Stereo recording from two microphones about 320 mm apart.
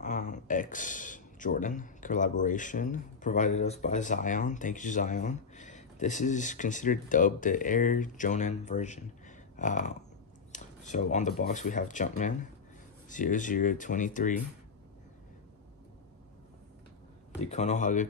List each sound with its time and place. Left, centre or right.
0.0 s speech: left
17.4 s speech: left